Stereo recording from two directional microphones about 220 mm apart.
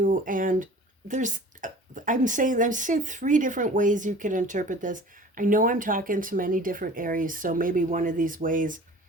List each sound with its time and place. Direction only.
0.0 s speech: 35° right (ahead or behind)